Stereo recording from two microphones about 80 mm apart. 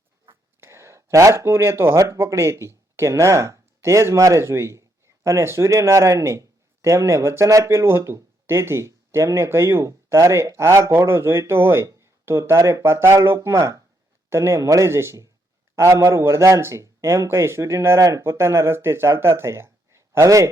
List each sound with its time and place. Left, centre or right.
0.3 s speech: right